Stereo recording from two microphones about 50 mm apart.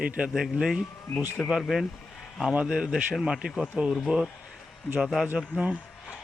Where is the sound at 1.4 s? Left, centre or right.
Centre.